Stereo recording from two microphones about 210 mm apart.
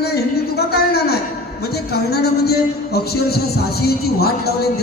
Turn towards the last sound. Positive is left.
turn(degrees=50)  # may be behind; listen again after turning